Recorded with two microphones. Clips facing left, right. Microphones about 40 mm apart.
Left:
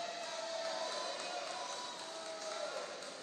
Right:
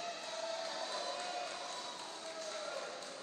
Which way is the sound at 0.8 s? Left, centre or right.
Right.